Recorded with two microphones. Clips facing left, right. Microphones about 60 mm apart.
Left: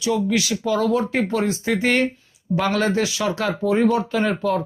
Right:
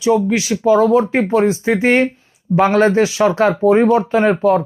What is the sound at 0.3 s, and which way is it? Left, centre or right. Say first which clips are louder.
Speech: right 7 dB; right.